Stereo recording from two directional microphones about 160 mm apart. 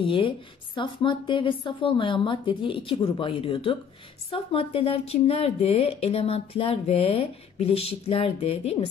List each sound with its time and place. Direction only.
0.0 s speech: 35° left (ahead or behind)